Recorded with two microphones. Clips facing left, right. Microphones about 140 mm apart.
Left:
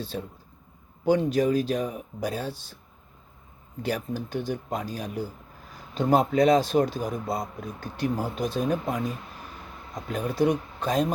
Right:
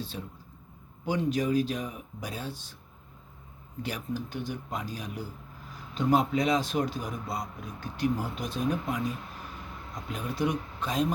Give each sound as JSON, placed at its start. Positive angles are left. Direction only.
{"t": 0.0, "sound": "speech", "side_deg": 35}
{"t": 3.8, "sound": "speech", "side_deg": 35}
{"t": 10.1, "sound": "speech", "side_deg": 40}